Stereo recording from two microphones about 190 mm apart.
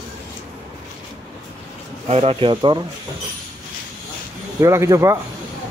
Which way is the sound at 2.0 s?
35° right (ahead or behind).